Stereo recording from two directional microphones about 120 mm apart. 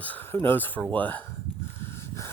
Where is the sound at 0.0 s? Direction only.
15° left (ahead or behind).